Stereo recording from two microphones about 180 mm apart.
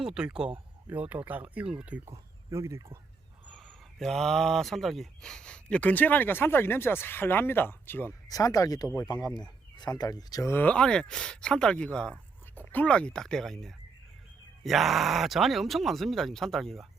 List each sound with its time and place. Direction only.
0.0 s speech: 5° right (ahead or behind)
3.5 s speech: centre (ahead or behind)